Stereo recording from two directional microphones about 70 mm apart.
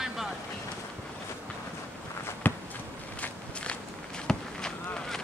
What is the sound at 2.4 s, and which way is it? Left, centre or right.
Walk, left.